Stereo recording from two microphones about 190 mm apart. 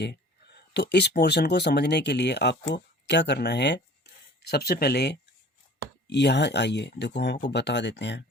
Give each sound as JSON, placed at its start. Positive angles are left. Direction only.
{"t": 0.0, "sound": "speech", "side_deg": 60}